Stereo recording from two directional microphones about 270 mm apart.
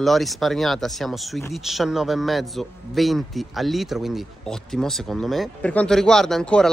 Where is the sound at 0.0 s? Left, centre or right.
Centre.